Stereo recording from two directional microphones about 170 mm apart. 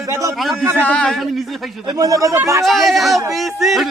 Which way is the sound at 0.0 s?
20° right (ahead or behind).